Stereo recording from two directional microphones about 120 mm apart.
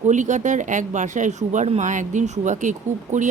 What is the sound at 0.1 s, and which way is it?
Speech, 90° right.